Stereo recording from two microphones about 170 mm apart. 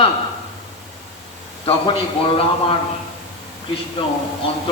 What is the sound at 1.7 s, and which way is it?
A man's voice, 30° left (ahead or behind).